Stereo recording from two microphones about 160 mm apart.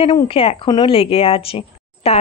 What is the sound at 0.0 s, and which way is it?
A woman's voice, 35° left (ahead or behind).